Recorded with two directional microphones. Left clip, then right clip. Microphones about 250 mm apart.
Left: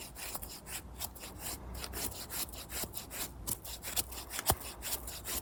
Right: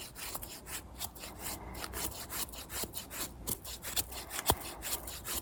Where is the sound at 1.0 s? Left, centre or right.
Centre.